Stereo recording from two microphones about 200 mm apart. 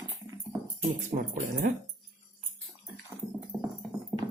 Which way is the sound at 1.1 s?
40° right (ahead or behind).